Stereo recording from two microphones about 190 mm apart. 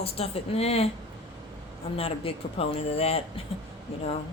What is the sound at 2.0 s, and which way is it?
A woman's voice, 30° left (ahead or behind).